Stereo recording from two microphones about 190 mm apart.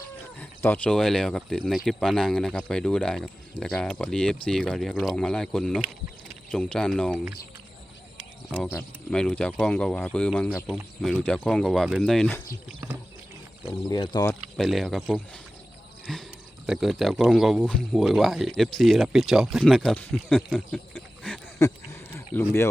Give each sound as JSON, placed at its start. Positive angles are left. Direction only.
{"t": 0.3, "sound": "speech", "side_deg": 10}
{"t": 8.5, "sound": "speech", "side_deg": 5}
{"t": 10.5, "sound": "speech", "side_deg": -5}
{"t": 13.9, "sound": "speech", "side_deg": 20}
{"t": 14.5, "sound": "speech", "side_deg": 0}
{"t": 20.7, "sound": "a sound", "side_deg": 10}